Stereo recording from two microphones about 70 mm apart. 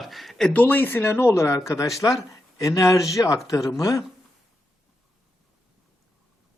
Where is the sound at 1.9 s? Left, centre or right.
Left.